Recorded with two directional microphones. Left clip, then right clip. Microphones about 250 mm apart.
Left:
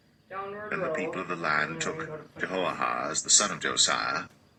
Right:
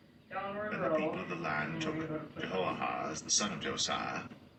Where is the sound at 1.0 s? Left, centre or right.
Left.